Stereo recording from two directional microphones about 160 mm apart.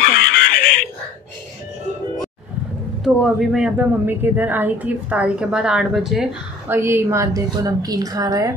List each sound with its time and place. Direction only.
0.0 s a sound: 65° left (ahead or behind)
3.0 s speech: centre (ahead or behind)
6.7 s a woman's voice: 15° right (ahead or behind)